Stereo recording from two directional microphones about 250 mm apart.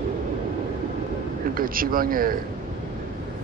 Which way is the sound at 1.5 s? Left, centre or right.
Right.